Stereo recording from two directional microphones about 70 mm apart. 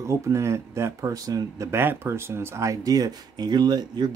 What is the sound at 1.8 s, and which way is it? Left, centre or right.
Speech, right.